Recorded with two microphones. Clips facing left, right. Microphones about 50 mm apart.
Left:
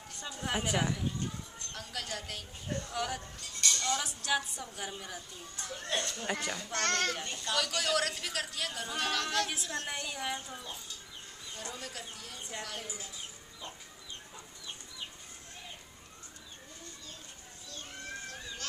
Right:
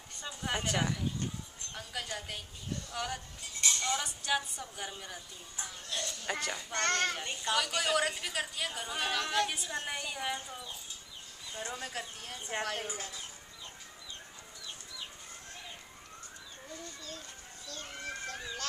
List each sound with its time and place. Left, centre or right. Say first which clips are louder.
0.1 s a woman's voice: left 1 dB; centre
1.7 s a woman's voice: right 1 dB; centre
2.9 s a woman's voice: left 1 dB; centre
3.6 s music: even; centre
4.0 s a woman's voice: even; centre
5.9 s speech: left 5 dB; left
6.5 s a child's voice: right 3 dB; centre
11.5 s speech: right 4 dB; right